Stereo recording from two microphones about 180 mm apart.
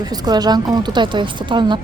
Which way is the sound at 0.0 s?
20° right (ahead or behind).